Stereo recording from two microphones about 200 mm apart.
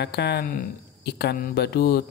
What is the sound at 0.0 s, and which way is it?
Speech, 55° left (ahead or behind).